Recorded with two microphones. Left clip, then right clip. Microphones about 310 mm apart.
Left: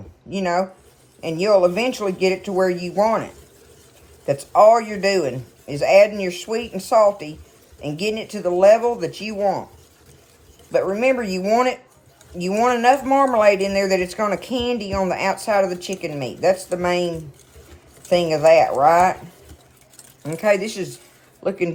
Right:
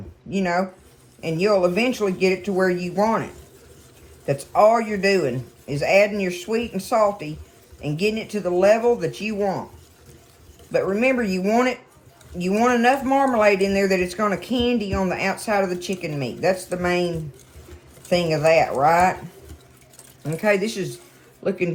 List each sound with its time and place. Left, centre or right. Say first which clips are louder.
0.3 s speech: left 2 dB; centre
4.3 s speech: left 4 dB; centre
10.7 s speech: left 2 dB; centre
20.2 s speech: left 2 dB; centre